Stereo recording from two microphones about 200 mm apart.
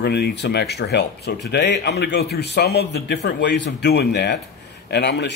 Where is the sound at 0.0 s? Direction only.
55° left (ahead or behind).